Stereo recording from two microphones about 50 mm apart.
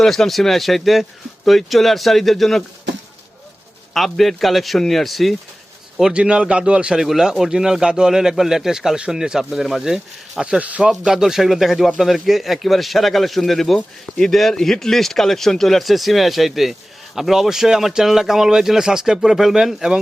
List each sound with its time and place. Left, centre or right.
0.0 s speech: centre
3.9 s speech: centre
6.1 s speech: right
7.0 s speech: centre
10.6 s speech: right
10.8 s speech: centre